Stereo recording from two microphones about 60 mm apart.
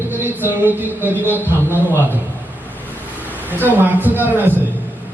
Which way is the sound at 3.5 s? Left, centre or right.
Right.